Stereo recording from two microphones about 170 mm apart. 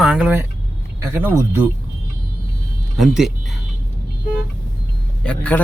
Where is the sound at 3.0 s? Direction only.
Centre (ahead or behind).